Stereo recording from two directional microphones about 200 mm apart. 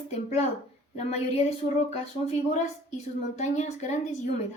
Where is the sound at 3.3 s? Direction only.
35° left (ahead or behind).